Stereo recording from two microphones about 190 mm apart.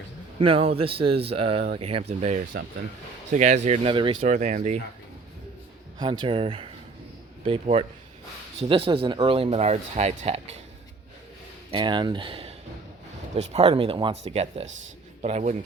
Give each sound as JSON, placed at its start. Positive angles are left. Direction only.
{"t": 0.3, "sound": "speech", "side_deg": -30}
{"t": 4.3, "sound": "speech", "side_deg": -40}
{"t": 6.0, "sound": "speech", "side_deg": -25}
{"t": 11.7, "sound": "speech", "side_deg": -25}